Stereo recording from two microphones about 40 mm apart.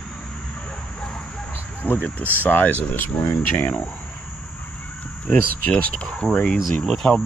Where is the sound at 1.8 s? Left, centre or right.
Left.